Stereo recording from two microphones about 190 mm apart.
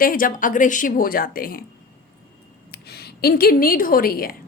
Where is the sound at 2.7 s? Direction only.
55° left (ahead or behind).